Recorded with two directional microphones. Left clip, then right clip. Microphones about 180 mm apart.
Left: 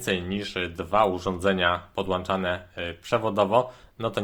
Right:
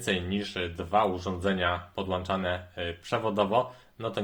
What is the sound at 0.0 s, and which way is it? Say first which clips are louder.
Speech: left 2 dB; 25° left (ahead or behind).